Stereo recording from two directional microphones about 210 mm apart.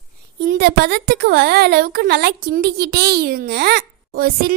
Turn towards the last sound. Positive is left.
turn(degrees=-45)  # may be behind; listen again after turning